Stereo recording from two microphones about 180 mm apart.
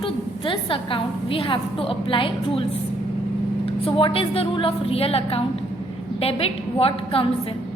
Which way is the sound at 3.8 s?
30° left (ahead or behind).